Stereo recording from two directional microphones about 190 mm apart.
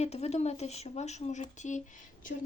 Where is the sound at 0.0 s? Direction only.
35° left (ahead or behind).